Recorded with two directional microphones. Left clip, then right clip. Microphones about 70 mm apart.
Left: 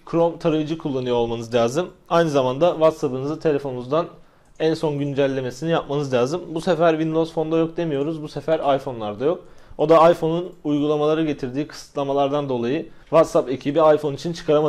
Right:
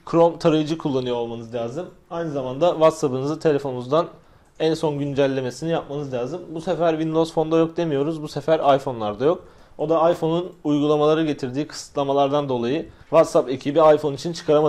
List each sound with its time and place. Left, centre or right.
0.1 s speech: right
1.3 s a man's voice: left
2.8 s speech: right
4.6 s speech: centre
5.9 s a man's voice: left
6.8 s speech: centre
7.1 s speech: right
9.8 s speech: left
10.2 s speech: right